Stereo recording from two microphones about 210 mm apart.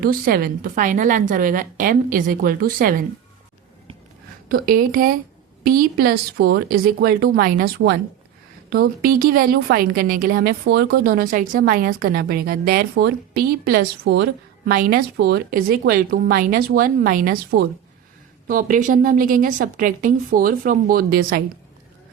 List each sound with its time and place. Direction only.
0.0 s a woman's voice: 45° right (ahead or behind)
4.4 s a woman's voice: 45° right (ahead or behind)